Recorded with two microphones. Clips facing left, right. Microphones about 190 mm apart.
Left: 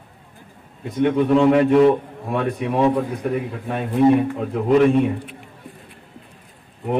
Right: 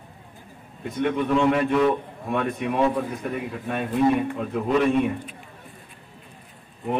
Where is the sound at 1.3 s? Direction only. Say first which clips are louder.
Left 6 dB; 35° left (ahead or behind).